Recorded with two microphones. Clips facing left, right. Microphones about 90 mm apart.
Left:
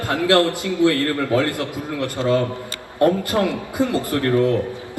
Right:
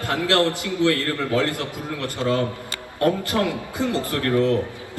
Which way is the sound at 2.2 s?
20° left (ahead or behind).